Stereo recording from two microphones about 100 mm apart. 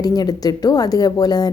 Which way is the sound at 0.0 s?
40° left (ahead or behind).